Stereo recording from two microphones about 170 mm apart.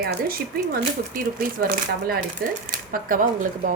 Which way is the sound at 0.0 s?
65° right (ahead or behind).